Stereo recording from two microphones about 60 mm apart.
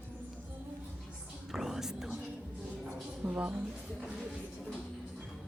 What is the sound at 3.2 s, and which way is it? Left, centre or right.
Speech, right.